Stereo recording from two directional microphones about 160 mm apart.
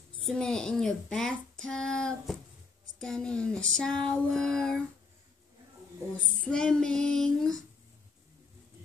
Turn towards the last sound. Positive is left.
turn(degrees=5)  # may be behind; listen again after turning